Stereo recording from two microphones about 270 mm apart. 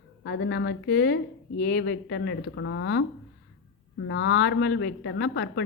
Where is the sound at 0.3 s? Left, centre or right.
Left.